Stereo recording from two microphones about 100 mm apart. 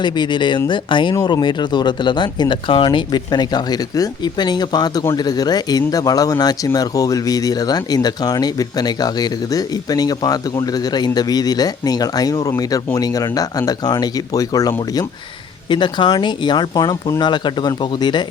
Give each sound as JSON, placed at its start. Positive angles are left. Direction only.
{"t": 0.0, "sound": "speech", "side_deg": 50}
{"t": 15.7, "sound": "speech", "side_deg": 50}